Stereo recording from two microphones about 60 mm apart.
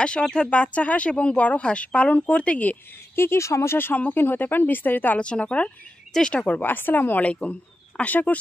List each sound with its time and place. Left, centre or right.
0.2 s speech: centre
3.2 s speech: left
3.7 s speech: left
5.2 s speech: centre